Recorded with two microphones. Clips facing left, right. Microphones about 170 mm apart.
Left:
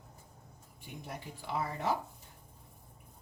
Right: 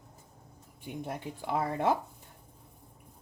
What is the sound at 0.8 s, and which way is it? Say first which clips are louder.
Speech: right 7 dB; 55° right (ahead or behind).